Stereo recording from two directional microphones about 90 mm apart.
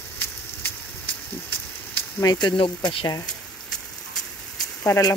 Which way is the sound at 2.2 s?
55° left (ahead or behind).